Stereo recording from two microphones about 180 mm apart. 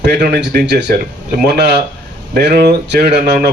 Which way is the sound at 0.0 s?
65° right (ahead or behind).